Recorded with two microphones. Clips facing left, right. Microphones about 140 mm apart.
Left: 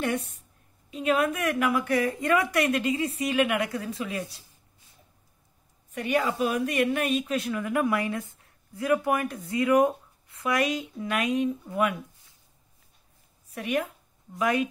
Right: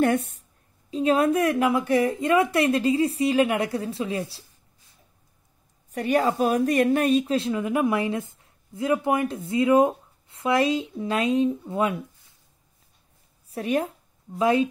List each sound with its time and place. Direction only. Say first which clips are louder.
0.0 s a woman's voice: right 7 dB; 50° right (ahead or behind)
0.8 s a woman's voice: right 4 dB; 35° right (ahead or behind)
5.9 s a woman's voice: right 4 dB; 35° right (ahead or behind)
13.5 s speech: right 4 dB; 35° right (ahead or behind)